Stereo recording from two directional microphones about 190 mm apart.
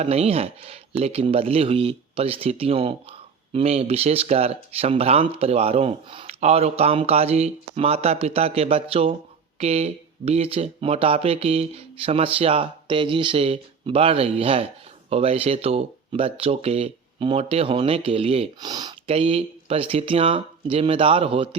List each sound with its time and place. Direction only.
0.0 s speech: 35° right (ahead or behind)